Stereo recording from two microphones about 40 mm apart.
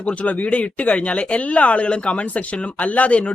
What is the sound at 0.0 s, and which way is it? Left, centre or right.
A man's voice, left.